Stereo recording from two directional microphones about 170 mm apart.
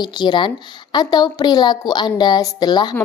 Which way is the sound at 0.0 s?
25° left (ahead or behind).